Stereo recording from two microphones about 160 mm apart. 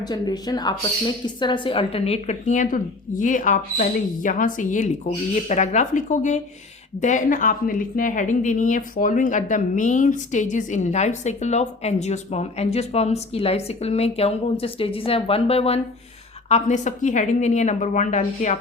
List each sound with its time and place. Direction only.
0.0 s a woman's voice: 25° left (ahead or behind); by 18.5 s 50° left (ahead or behind)